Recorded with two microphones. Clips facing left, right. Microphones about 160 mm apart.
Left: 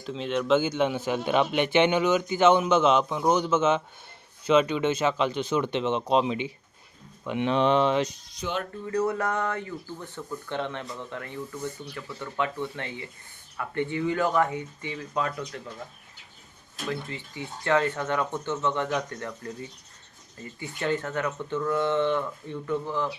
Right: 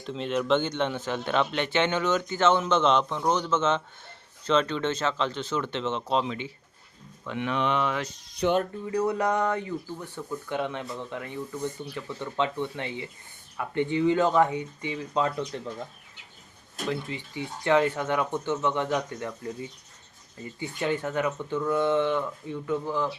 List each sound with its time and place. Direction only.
0.0 s speech: centre (ahead or behind); by 8.1 s 25° left (ahead or behind)
8.4 s speech: 65° right (ahead or behind)
8.9 s speech: 15° right (ahead or behind)
16.9 s speech: 15° right (ahead or behind)